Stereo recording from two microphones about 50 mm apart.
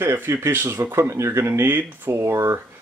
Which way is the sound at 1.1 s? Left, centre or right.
Right.